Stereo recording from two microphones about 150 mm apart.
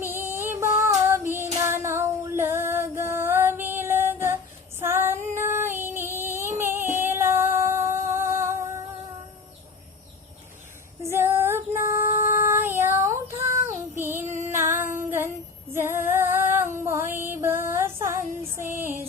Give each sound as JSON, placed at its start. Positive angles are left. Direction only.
{"t": 0.0, "sound": "female singing", "side_deg": -15}
{"t": 0.6, "sound": "music", "side_deg": -20}
{"t": 1.0, "sound": "child singing", "side_deg": -15}
{"t": 1.5, "sound": "female singing", "side_deg": -20}
{"t": 4.8, "sound": "child singing", "side_deg": -15}
{"t": 11.0, "sound": "female singing", "side_deg": -15}
{"t": 14.9, "sound": "child singing", "side_deg": -15}
{"t": 15.7, "sound": "female singing", "side_deg": -15}